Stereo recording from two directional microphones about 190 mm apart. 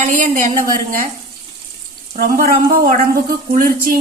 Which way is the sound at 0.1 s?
45° right (ahead or behind).